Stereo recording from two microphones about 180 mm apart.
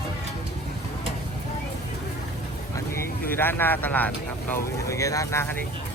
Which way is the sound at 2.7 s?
15° left (ahead or behind).